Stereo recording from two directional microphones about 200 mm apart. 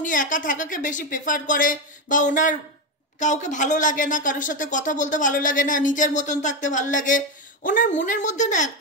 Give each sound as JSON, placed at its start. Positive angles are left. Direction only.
{"t": 0.0, "sound": "speech", "side_deg": 40}